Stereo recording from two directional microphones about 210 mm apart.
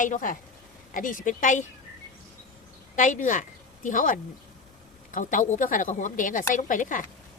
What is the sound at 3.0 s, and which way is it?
A woman's voice, 35° left (ahead or behind).